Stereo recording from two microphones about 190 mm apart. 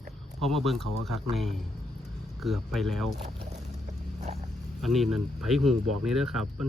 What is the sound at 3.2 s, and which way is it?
Speech, 30° right (ahead or behind).